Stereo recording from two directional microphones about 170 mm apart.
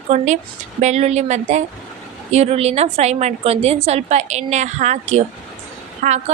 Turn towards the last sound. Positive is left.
turn(degrees=-50)  # may be behind; listen again after turning